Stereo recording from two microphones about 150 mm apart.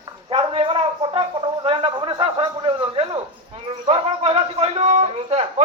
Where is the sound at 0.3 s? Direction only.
35° right (ahead or behind).